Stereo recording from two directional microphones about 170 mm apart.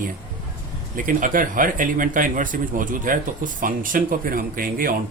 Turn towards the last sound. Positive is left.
turn(degrees=-55)  # may be behind; listen again after turning